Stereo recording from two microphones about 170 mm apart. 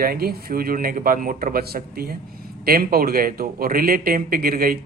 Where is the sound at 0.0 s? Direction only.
60° right (ahead or behind).